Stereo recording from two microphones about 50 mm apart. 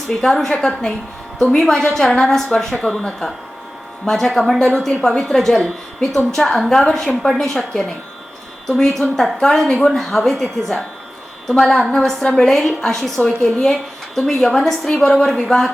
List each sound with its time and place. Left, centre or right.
0.2 s a woman's voice: centre